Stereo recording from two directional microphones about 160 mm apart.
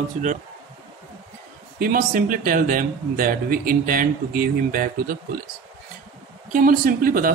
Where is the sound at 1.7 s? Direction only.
60° right (ahead or behind).